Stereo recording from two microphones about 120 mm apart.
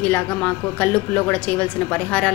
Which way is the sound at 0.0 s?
15° left (ahead or behind).